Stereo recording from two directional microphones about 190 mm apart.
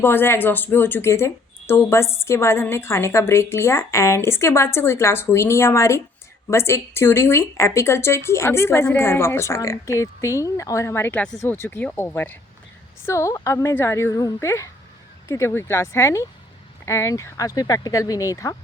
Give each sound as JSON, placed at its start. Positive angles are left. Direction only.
{"t": 0.0, "sound": "speech", "side_deg": 10}